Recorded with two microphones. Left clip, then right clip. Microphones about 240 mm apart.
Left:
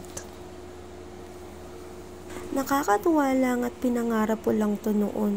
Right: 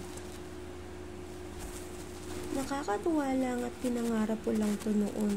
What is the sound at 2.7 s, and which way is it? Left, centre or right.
A woman's voice, left.